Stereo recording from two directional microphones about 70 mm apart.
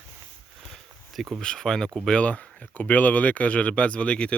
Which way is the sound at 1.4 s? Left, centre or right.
Centre.